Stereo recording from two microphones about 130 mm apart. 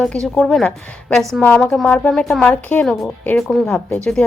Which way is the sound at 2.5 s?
15° left (ahead or behind).